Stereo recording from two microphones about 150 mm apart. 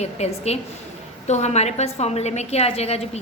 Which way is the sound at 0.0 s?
45° left (ahead or behind).